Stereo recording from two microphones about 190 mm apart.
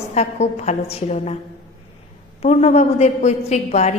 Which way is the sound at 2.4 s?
35° left (ahead or behind).